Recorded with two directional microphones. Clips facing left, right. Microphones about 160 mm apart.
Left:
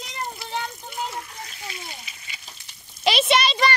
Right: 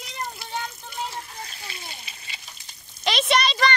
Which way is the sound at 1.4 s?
30° right (ahead or behind).